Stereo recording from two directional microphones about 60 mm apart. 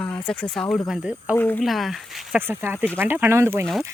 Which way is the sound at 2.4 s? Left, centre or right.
Right.